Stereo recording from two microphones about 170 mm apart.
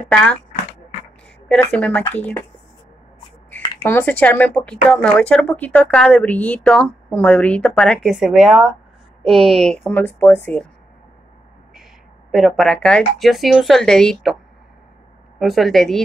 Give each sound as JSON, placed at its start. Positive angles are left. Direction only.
{"t": 1.5, "sound": "speech", "side_deg": 5}
{"t": 3.4, "sound": "speech", "side_deg": 10}
{"t": 12.3, "sound": "speech", "side_deg": 0}
{"t": 15.3, "sound": "speech", "side_deg": 0}